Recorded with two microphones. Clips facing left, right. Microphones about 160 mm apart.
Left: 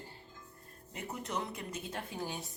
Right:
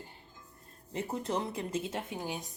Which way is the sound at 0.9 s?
30° right (ahead or behind).